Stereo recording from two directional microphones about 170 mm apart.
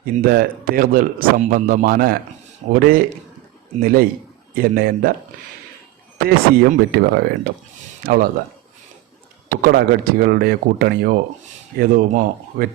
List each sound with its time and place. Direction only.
0.0 s speech: 60° right (ahead or behind)
6.2 s speech: 65° right (ahead or behind)
9.5 s speech: 65° right (ahead or behind)